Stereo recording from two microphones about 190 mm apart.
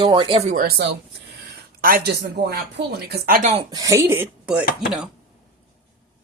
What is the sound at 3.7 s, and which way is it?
Speech, 20° right (ahead or behind).